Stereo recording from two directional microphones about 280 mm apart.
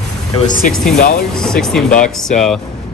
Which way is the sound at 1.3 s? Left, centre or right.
Centre.